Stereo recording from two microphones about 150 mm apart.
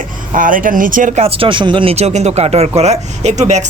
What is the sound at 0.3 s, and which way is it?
Speech, 65° right (ahead or behind).